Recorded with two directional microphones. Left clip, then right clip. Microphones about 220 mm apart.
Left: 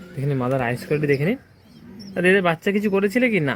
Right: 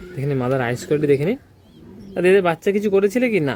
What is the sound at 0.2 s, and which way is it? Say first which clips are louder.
Speech: right 2 dB; centre (ahead or behind).